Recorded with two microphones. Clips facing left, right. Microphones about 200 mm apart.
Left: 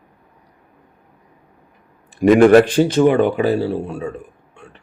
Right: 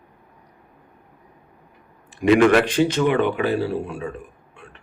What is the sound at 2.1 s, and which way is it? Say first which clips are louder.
Speech: left 6 dB; 50° left (ahead or behind).